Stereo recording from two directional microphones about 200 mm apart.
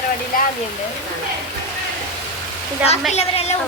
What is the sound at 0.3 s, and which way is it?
Waterfall, 45° left (ahead or behind).